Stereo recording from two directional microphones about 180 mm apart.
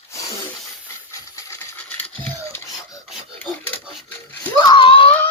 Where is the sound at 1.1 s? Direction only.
15° left (ahead or behind).